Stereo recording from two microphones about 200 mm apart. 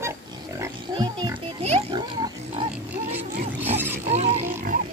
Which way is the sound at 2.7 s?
10° right (ahead or behind).